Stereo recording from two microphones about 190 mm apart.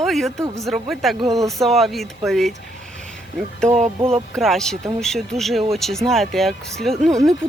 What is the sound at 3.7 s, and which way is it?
Speech, 35° right (ahead or behind).